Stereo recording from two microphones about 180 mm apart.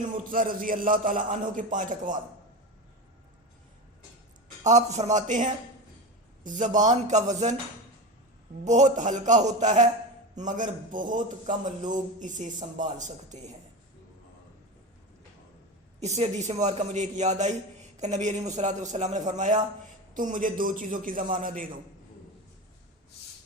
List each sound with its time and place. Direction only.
0.3 s a man's voice: 50° right (ahead or behind)
4.6 s a man's voice: 40° right (ahead or behind)
8.6 s a man's voice: 40° right (ahead or behind)
16.0 s a man's voice: 35° right (ahead or behind)